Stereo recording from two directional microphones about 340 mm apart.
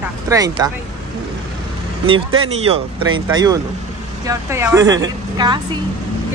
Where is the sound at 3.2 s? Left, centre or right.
Centre.